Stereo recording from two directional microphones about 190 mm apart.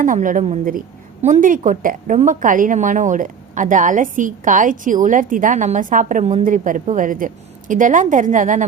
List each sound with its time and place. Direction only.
0.0 s a woman's voice: 45° right (ahead or behind)